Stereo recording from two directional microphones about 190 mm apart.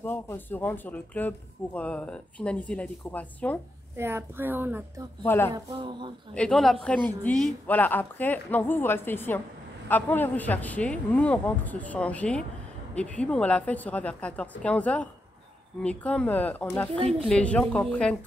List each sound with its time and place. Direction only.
0.0 s a man's voice: 10° left (ahead or behind)
3.9 s a woman's voice: 10° right (ahead or behind)
5.2 s a man's voice: 10° left (ahead or behind)
5.5 s speech: 25° right (ahead or behind)
6.3 s a man's voice: 5° left (ahead or behind)